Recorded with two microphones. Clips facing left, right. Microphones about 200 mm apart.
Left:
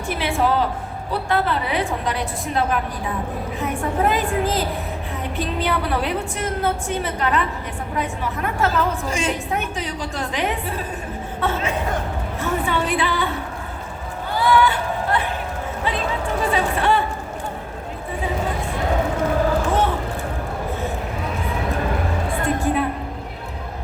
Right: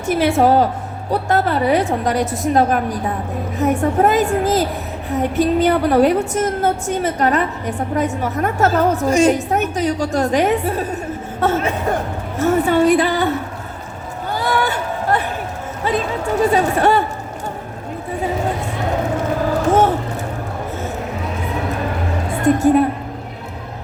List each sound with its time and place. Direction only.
0.1 s a woman's voice: 45° right (ahead or behind)
12.4 s music: 45° right (ahead or behind)
14.3 s a sound: 45° right (ahead or behind)
22.3 s music: 45° right (ahead or behind)